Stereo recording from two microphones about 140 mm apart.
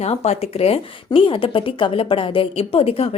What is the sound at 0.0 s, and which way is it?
Speech, 50° left (ahead or behind).